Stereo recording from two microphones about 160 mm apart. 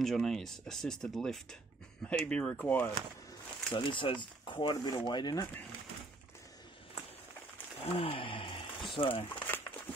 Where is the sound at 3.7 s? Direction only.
30° left (ahead or behind).